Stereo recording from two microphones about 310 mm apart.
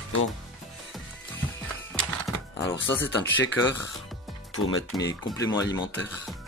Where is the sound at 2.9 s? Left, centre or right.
Centre.